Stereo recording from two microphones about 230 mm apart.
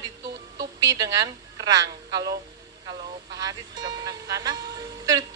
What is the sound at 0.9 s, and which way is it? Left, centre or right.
Speech, centre.